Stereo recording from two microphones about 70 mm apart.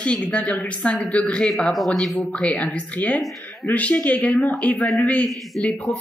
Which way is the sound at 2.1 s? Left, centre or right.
Centre.